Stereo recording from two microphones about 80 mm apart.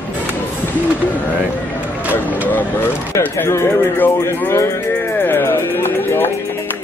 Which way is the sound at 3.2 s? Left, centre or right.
Left.